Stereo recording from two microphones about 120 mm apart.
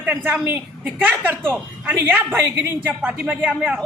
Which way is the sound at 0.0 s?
15° right (ahead or behind).